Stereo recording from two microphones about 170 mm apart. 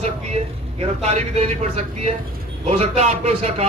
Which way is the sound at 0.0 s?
40° right (ahead or behind).